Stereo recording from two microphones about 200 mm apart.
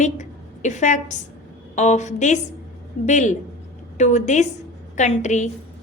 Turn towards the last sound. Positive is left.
turn(degrees=35)  # may be behind; listen again after turning